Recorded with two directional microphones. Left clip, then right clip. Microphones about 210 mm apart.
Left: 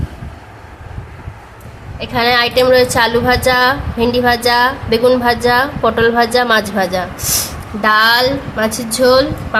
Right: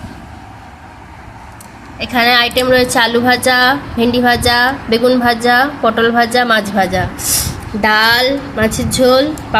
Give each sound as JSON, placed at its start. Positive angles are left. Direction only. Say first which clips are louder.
{"t": 2.0, "sound": "a woman's voice", "louder": "right 2 dB", "side_deg": -5}